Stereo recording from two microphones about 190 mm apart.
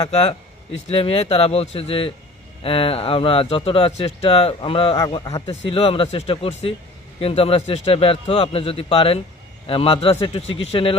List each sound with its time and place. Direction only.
0.0 s speech: 30° left (ahead or behind)